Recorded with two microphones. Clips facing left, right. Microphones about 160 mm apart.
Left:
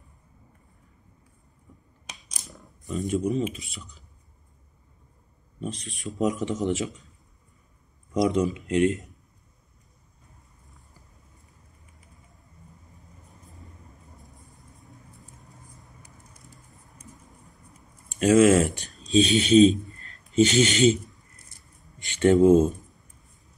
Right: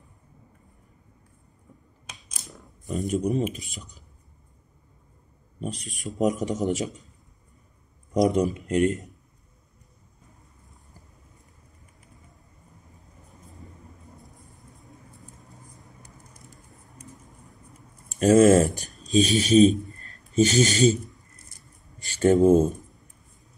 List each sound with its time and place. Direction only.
2.9 s speech: 40° right (ahead or behind)
5.9 s a man's voice: 40° right (ahead or behind)
8.1 s a man's voice: 40° right (ahead or behind)
14.8 s vehicle: centre (ahead or behind)
17.1 s a sound: centre (ahead or behind)
18.0 s a sound: 40° right (ahead or behind)
18.8 s speech: 40° right (ahead or behind)
20.0 s a sound: 40° right (ahead or behind)
21.9 s speech: 40° right (ahead or behind)